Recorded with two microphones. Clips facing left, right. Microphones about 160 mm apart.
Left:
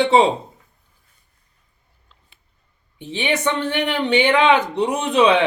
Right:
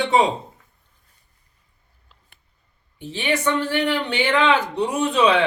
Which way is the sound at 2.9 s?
20° left (ahead or behind).